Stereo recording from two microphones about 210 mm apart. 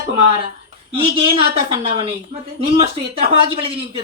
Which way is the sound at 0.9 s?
25° right (ahead or behind).